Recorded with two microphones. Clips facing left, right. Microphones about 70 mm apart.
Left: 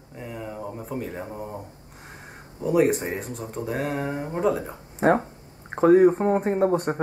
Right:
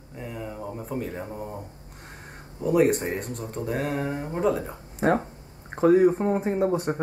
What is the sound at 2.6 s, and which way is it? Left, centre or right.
Speech, centre.